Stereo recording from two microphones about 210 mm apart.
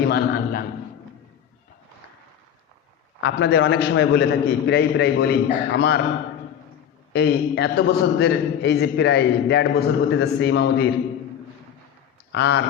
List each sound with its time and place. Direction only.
0.0 s a man's voice: 50° left (ahead or behind)
3.2 s a man's voice: 60° left (ahead or behind)
7.1 s a man's voice: 50° left (ahead or behind)
12.3 s a man's voice: 55° left (ahead or behind)